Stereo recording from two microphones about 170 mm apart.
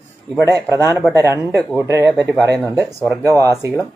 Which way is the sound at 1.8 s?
15° right (ahead or behind).